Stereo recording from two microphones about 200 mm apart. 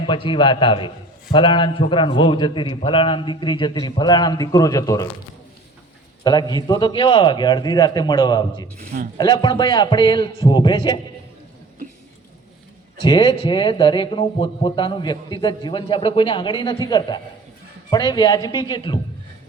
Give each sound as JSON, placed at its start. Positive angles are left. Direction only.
{"t": 0.0, "sound": "a man's voice", "side_deg": 25}
{"t": 6.2, "sound": "a man's voice", "side_deg": 20}
{"t": 8.8, "sound": "speech", "side_deg": -45}
{"t": 9.1, "sound": "a man's voice", "side_deg": 20}
{"t": 13.0, "sound": "a man's voice", "side_deg": 25}